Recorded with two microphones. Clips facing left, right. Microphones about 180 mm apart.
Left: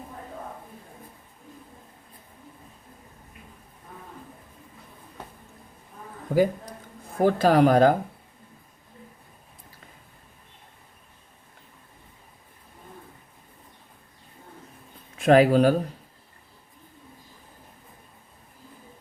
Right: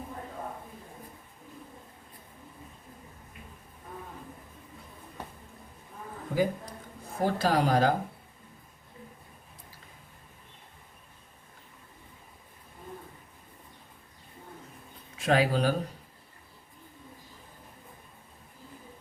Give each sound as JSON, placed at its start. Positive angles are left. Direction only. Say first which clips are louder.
{"t": 6.3, "sound": "speech", "louder": "left 6 dB", "side_deg": 50}
{"t": 15.2, "sound": "speech", "louder": "left 8 dB", "side_deg": 50}